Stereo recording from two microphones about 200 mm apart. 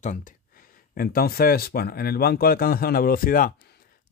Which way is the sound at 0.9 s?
50° left (ahead or behind).